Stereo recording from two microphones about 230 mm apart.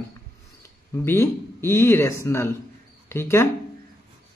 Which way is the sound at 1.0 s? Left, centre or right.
Centre.